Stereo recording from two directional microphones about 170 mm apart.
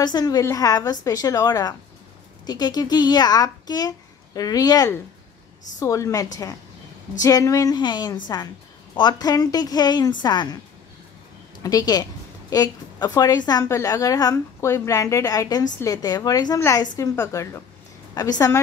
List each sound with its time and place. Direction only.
0.0 s a woman's voice: 25° left (ahead or behind)
11.6 s a woman's voice: 20° left (ahead or behind)